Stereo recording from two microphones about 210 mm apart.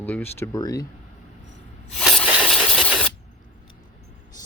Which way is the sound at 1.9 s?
Centre (ahead or behind).